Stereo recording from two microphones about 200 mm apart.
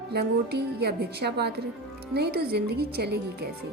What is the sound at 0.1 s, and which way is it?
Speech, 55° right (ahead or behind).